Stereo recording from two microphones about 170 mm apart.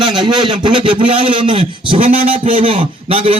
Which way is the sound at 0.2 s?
25° right (ahead or behind).